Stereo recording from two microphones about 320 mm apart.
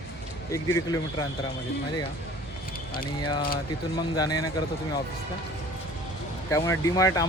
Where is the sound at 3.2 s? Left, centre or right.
Centre.